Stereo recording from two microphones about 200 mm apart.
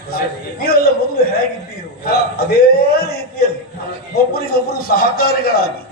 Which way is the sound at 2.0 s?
50° left (ahead or behind).